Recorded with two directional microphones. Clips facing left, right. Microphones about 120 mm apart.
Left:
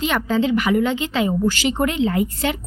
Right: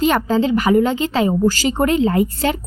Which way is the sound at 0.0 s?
40° right (ahead or behind).